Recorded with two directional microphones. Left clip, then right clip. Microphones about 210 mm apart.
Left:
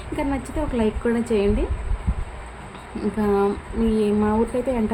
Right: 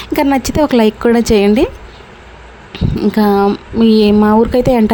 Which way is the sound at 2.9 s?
45° right (ahead or behind).